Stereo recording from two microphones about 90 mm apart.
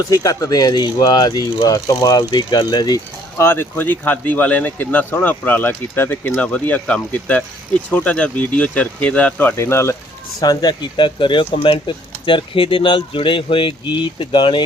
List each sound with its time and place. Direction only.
0.1 s speech: 40° left (ahead or behind)
3.3 s a man's voice: 25° left (ahead or behind)
10.4 s speech: 50° left (ahead or behind); by 14.6 s 65° left (ahead or behind)